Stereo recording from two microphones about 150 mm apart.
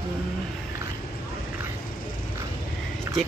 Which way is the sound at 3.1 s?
20° right (ahead or behind).